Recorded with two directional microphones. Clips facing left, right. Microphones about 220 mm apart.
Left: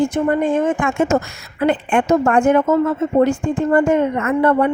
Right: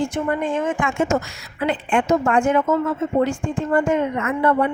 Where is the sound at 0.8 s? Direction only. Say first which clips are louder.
Left 4 dB; 60° left (ahead or behind).